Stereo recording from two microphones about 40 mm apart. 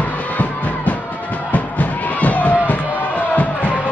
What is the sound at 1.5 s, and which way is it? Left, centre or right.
Music, left.